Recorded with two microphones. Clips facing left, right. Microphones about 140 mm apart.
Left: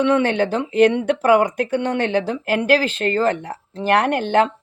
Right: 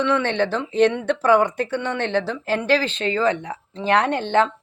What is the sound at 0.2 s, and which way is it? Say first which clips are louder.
Speech: left 3 dB; 10° left (ahead or behind).